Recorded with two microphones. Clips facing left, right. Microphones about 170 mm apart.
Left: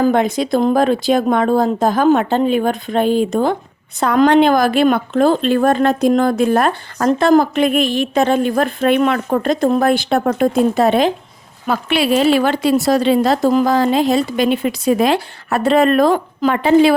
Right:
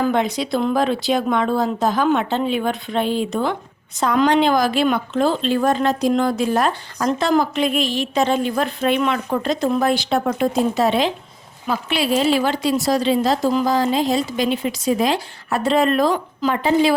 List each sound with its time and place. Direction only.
0.0 s speech: 50° left (ahead or behind)
4.0 s speech: 55° left (ahead or behind)
11.7 s a woman's voice: 65° left (ahead or behind)